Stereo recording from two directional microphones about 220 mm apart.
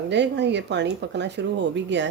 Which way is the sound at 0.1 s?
50° right (ahead or behind).